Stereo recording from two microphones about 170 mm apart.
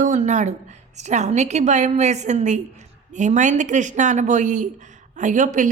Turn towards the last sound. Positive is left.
turn(degrees=-50)  # may be behind; listen again after turning